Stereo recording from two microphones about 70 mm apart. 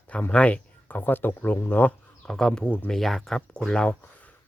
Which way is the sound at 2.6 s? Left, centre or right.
Left.